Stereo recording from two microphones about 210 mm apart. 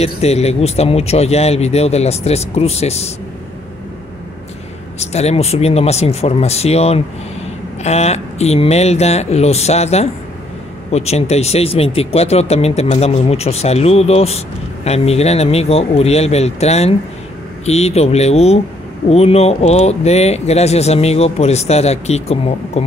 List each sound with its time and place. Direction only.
0.0 s speech: 30° left (ahead or behind)
4.9 s speech: 30° left (ahead or behind)